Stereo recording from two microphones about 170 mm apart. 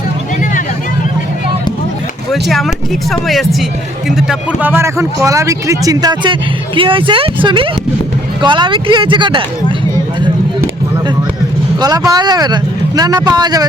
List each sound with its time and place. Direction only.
2.3 s speech: centre (ahead or behind)
4.7 s speech: 15° right (ahead or behind)
11.8 s speech: 20° right (ahead or behind)